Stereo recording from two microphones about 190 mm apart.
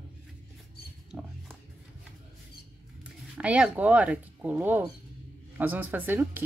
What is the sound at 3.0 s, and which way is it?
Speech, 5° right (ahead or behind).